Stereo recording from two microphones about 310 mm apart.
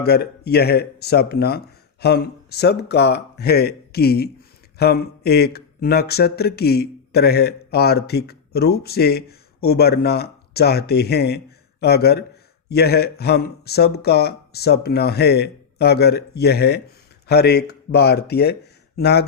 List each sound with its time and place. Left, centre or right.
0.0 s speech: left